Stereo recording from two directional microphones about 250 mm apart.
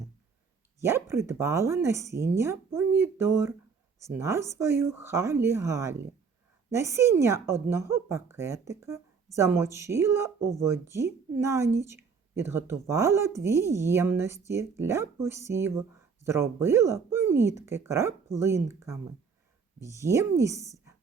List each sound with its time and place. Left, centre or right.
0.8 s a woman's voice: centre